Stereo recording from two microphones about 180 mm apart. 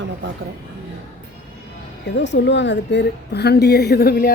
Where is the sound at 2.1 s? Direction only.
80° left; by 4.3 s 60° left (ahead or behind).